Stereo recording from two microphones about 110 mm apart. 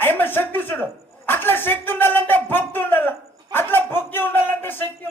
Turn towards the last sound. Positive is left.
turn(degrees=20)  # may be behind; listen again after turning